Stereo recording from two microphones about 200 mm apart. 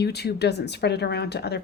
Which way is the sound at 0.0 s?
55° left (ahead or behind).